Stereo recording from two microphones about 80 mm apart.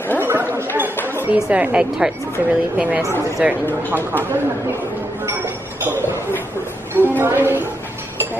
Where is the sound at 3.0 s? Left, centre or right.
Left.